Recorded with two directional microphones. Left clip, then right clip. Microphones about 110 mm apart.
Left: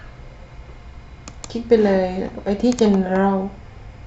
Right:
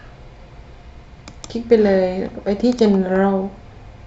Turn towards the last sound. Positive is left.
turn(degrees=-15)  # may be behind; listen again after turning